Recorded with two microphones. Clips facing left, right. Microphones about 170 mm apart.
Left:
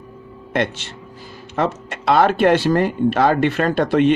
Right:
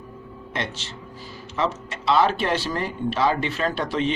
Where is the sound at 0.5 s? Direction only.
55° left (ahead or behind).